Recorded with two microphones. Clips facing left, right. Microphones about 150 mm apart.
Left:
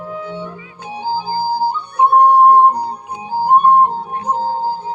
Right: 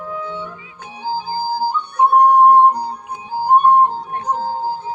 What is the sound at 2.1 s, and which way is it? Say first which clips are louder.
Music: left 2 dB; 30° left (ahead or behind).